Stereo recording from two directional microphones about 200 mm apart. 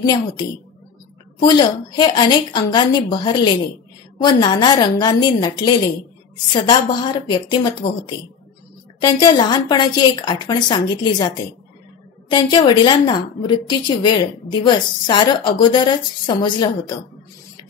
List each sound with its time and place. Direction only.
0.0 s a woman's voice: 20° left (ahead or behind)